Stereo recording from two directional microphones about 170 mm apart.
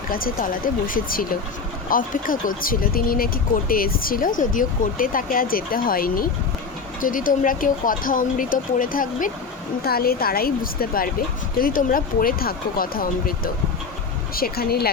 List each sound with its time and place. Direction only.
0.1 s speech: 55° left (ahead or behind)